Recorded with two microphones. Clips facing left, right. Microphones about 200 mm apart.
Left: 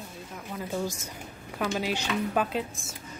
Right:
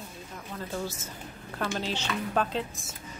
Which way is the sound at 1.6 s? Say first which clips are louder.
Left 3 dB; 10° left (ahead or behind).